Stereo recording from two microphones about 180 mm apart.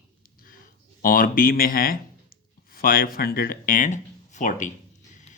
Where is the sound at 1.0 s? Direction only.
50° left (ahead or behind).